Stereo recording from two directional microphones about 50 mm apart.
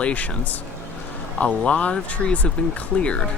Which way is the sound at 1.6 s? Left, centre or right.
Left.